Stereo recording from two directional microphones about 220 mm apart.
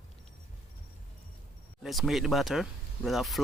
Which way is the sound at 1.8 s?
Centre (ahead or behind).